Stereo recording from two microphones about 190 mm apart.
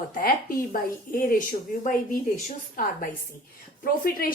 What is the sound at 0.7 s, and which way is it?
A woman's voice, 45° left (ahead or behind).